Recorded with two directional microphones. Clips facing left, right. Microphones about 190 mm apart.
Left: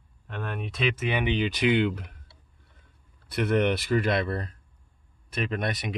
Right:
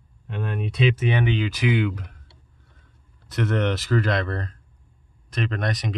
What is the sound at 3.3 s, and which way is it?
Speech, 15° left (ahead or behind).